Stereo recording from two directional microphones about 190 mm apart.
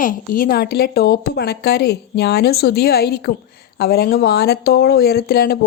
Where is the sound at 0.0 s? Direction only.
45° left (ahead or behind).